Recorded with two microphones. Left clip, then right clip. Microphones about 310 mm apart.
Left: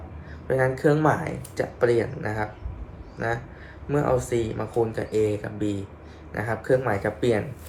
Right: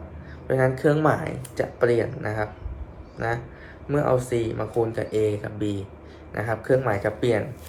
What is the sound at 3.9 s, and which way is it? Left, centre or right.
Speech, centre.